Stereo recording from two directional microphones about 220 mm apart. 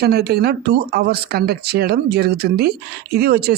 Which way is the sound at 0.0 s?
45° right (ahead or behind).